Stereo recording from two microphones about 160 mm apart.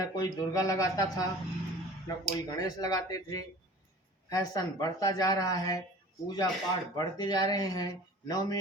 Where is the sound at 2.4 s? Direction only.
25° left (ahead or behind).